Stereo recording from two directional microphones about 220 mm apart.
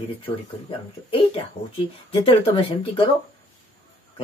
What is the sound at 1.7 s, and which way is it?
Speech, 25° left (ahead or behind).